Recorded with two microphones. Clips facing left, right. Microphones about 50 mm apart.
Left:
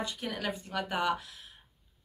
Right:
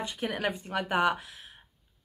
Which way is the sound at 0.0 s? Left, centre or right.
Right.